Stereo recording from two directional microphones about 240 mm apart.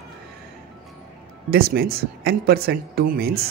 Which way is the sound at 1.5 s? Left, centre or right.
Right.